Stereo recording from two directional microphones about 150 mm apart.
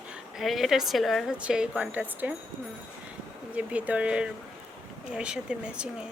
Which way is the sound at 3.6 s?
10° right (ahead or behind).